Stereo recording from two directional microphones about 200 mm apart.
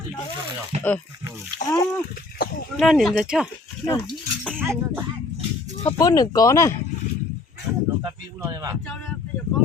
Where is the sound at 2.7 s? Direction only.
Centre (ahead or behind).